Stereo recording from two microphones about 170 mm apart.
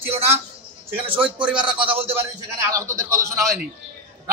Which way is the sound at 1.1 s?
30° right (ahead or behind).